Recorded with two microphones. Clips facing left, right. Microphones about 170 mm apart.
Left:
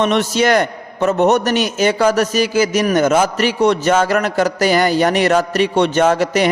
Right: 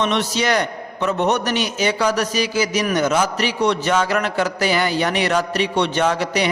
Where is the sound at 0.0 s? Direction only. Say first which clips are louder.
Left 5 dB; 45° left (ahead or behind).